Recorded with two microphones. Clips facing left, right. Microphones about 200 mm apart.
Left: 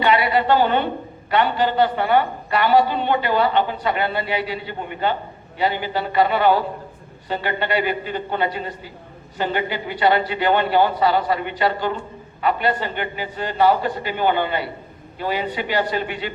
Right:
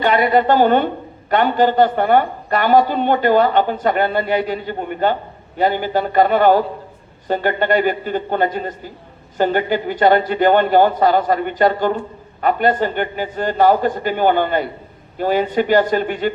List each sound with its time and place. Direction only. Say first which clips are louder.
0.0 s a woman's voice: right 4 dB; 45° right (ahead or behind)